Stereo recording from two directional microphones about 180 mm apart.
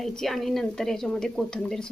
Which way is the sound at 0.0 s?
Centre (ahead or behind).